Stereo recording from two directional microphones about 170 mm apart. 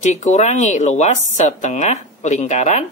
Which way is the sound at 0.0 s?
45° left (ahead or behind).